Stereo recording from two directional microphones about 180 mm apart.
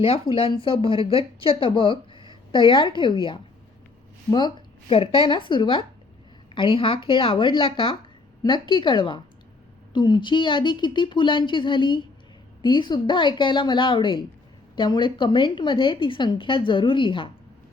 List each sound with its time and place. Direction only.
0.0 s speech: 30° left (ahead or behind)